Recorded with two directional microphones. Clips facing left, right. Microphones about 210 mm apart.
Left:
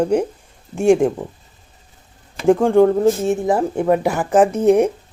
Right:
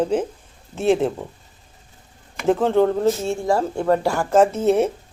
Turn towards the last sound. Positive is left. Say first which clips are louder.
# left 3 dB
turn(degrees=15)  # may be behind; listen again after turning